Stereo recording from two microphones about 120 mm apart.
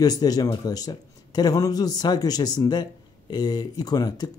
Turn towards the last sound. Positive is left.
turn(degrees=35)  # may be behind; listen again after turning